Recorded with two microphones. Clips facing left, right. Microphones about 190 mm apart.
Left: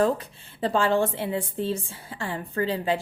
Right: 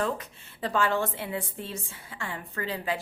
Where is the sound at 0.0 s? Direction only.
30° left (ahead or behind).